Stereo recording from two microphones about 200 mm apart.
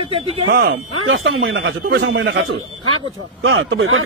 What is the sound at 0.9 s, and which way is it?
Speech, 85° right.